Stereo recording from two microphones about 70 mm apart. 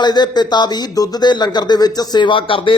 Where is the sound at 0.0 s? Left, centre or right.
Left.